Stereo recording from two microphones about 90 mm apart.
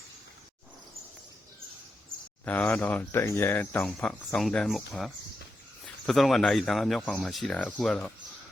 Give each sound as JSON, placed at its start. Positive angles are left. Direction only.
{"t": 2.4, "sound": "speech", "side_deg": 20}
{"t": 3.1, "sound": "speech", "side_deg": 30}
{"t": 3.8, "sound": "speech", "side_deg": 10}